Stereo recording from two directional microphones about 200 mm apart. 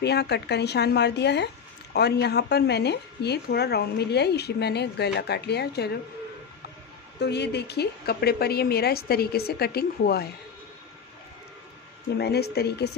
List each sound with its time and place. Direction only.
0.0 s a woman's voice: 55° left (ahead or behind)
7.2 s a woman's voice: 55° left (ahead or behind)
12.2 s a woman's voice: 55° left (ahead or behind)